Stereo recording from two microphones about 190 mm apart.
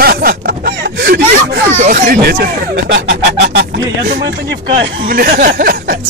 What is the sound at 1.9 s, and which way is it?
Speech, 50° right (ahead or behind).